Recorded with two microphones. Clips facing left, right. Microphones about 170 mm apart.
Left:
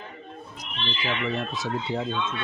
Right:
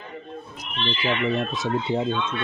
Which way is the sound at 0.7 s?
60° right (ahead or behind).